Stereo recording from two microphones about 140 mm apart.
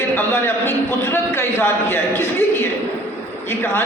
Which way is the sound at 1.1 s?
15° left (ahead or behind).